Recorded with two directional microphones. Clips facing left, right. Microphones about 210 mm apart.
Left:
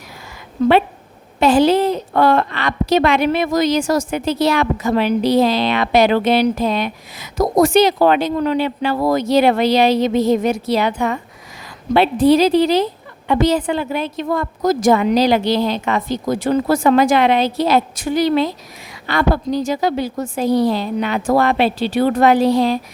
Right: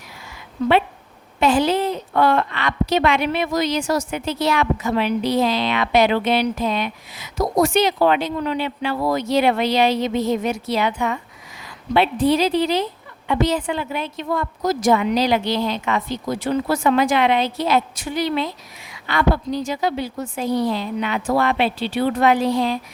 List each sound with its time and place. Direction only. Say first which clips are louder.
1.4 s a woman's voice: left 5 dB; 35° left (ahead or behind)
12.3 s a woman's voice: left 6 dB; 40° left (ahead or behind)